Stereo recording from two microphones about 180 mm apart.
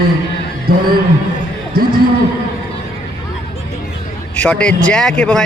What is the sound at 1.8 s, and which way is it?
Speech, 55° right (ahead or behind).